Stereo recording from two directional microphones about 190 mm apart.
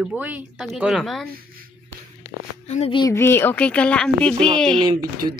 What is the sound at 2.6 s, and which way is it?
Speech, 35° left (ahead or behind).